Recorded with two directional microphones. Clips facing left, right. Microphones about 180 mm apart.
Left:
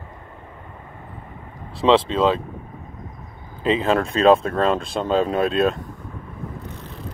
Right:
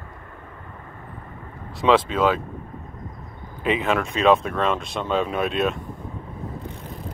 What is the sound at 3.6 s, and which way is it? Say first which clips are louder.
Speech: left 3 dB; 30° left (ahead or behind).